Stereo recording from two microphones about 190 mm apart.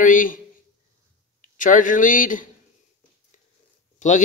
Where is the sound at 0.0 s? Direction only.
45° left (ahead or behind).